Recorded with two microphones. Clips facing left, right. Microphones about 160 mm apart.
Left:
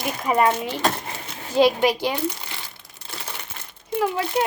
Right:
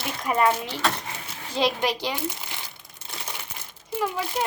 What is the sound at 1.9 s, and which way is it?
Speech, 50° left (ahead or behind).